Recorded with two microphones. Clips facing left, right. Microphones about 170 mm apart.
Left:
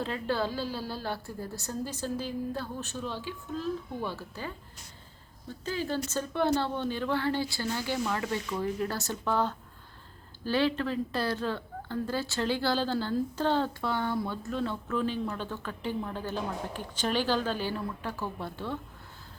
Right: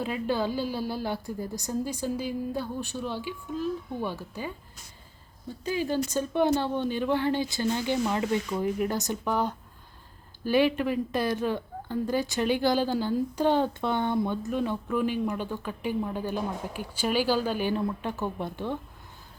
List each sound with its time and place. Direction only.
0.0 s speech: 15° right (ahead or behind)
5.6 s speech: 15° right (ahead or behind)